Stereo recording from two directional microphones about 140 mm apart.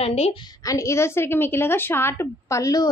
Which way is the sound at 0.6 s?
20° left (ahead or behind).